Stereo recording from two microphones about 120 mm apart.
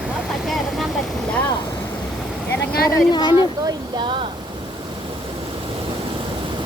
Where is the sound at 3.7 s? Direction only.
40° right (ahead or behind).